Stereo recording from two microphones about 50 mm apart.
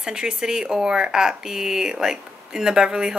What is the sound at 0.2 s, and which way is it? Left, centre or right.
Speech, centre.